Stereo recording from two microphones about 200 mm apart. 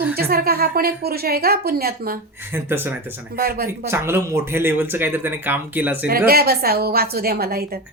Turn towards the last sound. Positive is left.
turn(degrees=-50)  # may be behind; listen again after turning